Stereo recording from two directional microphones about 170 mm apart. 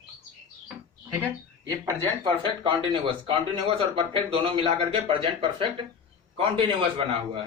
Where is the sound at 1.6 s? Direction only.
20° right (ahead or behind).